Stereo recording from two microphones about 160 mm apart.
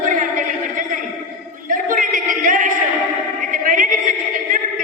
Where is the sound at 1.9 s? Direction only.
55° right (ahead or behind).